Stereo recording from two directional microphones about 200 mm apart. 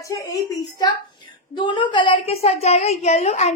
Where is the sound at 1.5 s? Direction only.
25° left (ahead or behind).